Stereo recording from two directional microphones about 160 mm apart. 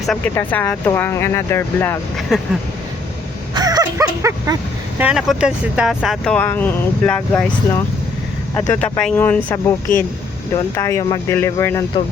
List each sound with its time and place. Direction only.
0.3 s speech: 10° left (ahead or behind)
2.3 s speech: 5° right (ahead or behind)
3.5 s dog: 25° right (ahead or behind)
4.9 s speech: 5° right (ahead or behind); by 11.9 s 15° left (ahead or behind)